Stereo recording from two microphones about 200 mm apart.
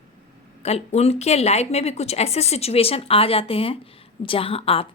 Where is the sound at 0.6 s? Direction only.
35° left (ahead or behind).